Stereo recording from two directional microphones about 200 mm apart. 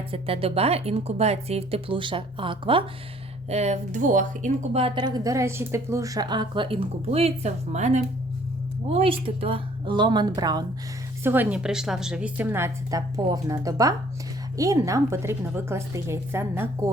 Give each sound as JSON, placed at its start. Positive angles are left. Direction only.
{"t": 0.1, "sound": "a woman's voice", "side_deg": -30}